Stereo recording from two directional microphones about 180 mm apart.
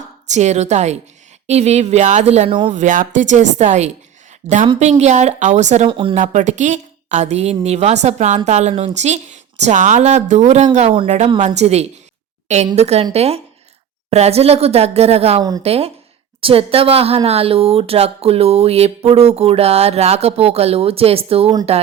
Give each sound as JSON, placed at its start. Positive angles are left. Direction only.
{"t": 0.3, "sound": "speech", "side_deg": -40}
{"t": 5.9, "sound": "speech", "side_deg": -30}
{"t": 6.1, "sound": "speech", "side_deg": -40}